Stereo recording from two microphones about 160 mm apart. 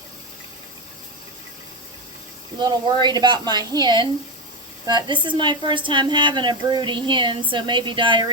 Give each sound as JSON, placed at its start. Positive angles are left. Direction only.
{"t": 2.6, "sound": "a woman's voice", "side_deg": -25}